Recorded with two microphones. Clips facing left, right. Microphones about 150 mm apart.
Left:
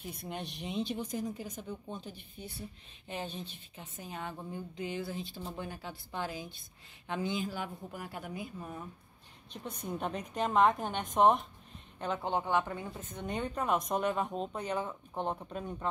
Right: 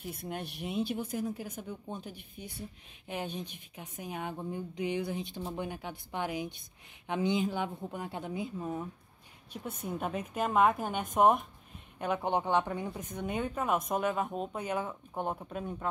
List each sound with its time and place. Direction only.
0.0 s a woman's voice: 5° right (ahead or behind); by 8.8 s 20° right (ahead or behind)
9.5 s speech: 5° right (ahead or behind)